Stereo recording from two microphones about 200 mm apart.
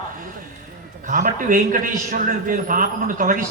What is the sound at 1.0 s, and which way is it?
A man's voice, 40° right (ahead or behind).